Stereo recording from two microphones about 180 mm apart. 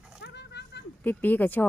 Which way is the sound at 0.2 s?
70° left (ahead or behind).